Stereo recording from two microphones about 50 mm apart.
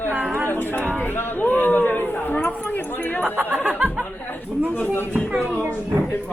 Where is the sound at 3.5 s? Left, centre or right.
Right.